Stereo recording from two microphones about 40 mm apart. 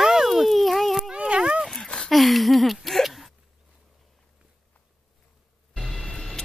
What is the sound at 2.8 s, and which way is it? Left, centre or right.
Hiccup, centre.